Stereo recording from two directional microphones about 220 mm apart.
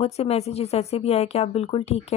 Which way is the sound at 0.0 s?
30° left (ahead or behind).